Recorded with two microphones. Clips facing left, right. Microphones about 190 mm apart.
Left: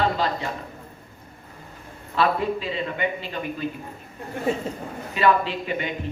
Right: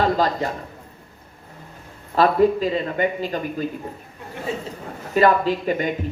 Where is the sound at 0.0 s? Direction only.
40° right (ahead or behind).